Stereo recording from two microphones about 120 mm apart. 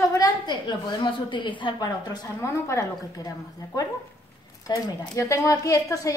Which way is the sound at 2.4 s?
25° left (ahead or behind).